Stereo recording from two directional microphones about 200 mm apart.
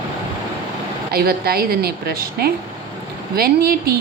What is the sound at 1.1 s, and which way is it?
A woman's voice, 50° right (ahead or behind).